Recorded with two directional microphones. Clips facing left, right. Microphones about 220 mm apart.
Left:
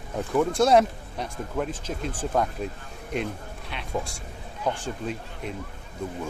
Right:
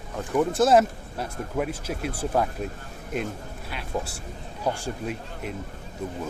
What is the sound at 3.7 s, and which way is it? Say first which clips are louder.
Speech: even; 5° right (ahead or behind).